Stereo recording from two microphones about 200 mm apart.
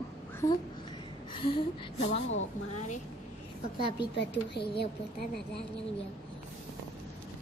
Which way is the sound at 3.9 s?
55° left (ahead or behind).